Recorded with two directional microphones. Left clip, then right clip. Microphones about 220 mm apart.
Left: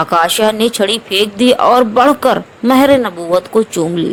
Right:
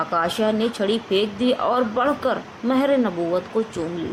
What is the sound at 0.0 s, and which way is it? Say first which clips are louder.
A woman's voice: left 10 dB; 45° left (ahead or behind).